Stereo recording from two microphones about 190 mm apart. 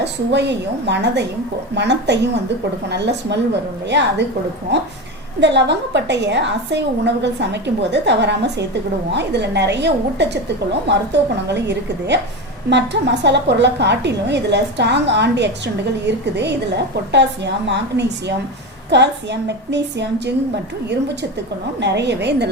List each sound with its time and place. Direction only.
0.0 s a woman's voice: 65° right (ahead or behind)
21.8 s a woman's voice: 65° right (ahead or behind)